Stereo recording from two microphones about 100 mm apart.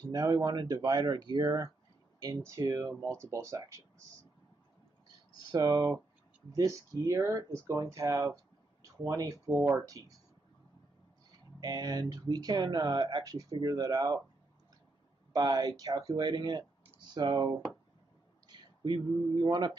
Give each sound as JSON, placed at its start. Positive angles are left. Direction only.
{"t": 0.0, "sound": "speech", "side_deg": -40}
{"t": 2.1, "sound": "speech", "side_deg": -35}
{"t": 5.5, "sound": "speech", "side_deg": -40}
{"t": 11.6, "sound": "speech", "side_deg": -40}
{"t": 15.3, "sound": "speech", "side_deg": -45}
{"t": 19.4, "sound": "speech", "side_deg": -45}